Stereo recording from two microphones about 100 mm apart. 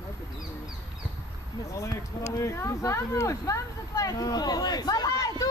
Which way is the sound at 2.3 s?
30° left (ahead or behind).